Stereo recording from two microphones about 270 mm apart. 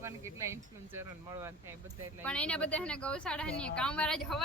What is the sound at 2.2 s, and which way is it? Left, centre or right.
Speech, centre.